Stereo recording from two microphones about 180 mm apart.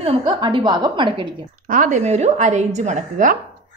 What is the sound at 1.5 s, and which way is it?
A woman's voice, 50° right (ahead or behind).